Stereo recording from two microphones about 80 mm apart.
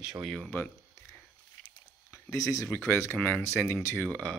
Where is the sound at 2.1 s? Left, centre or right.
Left.